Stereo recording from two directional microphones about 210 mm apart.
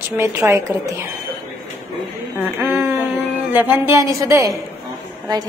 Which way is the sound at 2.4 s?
10° right (ahead or behind).